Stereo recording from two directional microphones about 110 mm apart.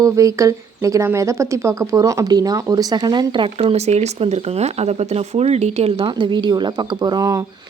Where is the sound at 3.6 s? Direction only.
70° right (ahead or behind).